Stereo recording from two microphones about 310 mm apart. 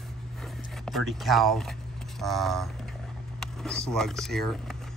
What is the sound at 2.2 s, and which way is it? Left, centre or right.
Speech, centre.